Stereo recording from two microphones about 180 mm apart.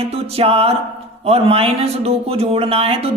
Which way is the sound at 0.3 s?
35° right (ahead or behind).